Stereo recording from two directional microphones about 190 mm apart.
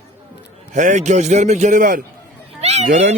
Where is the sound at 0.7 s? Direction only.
40° right (ahead or behind).